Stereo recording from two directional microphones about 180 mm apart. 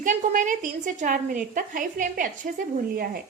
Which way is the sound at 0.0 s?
45° right (ahead or behind).